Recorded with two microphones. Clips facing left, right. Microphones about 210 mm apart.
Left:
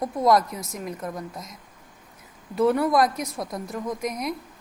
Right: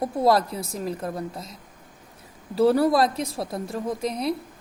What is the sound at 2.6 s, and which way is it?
A woman's voice, 30° right (ahead or behind).